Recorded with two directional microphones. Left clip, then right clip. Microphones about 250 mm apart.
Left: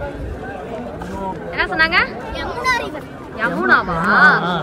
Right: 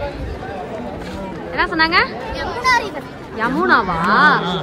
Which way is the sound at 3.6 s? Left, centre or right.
Centre.